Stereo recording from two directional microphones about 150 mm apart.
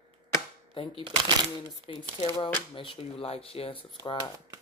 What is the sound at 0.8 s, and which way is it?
Speech, 35° left (ahead or behind).